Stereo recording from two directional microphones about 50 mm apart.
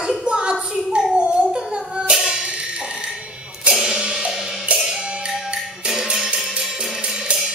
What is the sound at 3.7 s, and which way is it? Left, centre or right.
Music, centre.